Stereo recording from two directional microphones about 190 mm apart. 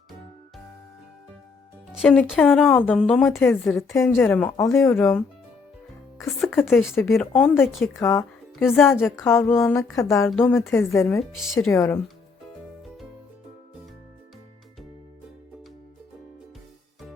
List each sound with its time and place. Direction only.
1.9 s speech: centre (ahead or behind)
3.9 s speech: 10° left (ahead or behind)
6.5 s speech: 10° left (ahead or behind)
8.5 s a woman's voice: centre (ahead or behind)
9.0 s speech: 10° left (ahead or behind)
11.2 s speech: centre (ahead or behind)
11.7 s speech: 15° left (ahead or behind)